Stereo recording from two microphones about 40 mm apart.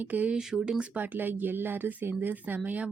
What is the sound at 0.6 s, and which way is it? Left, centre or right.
Speech, right.